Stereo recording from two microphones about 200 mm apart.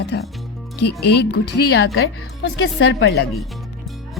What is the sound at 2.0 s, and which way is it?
A woman's voice, 65° left (ahead or behind).